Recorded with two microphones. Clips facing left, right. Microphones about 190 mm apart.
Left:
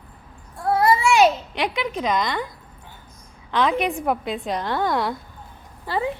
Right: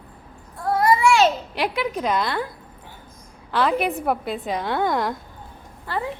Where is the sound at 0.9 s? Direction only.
25° left (ahead or behind).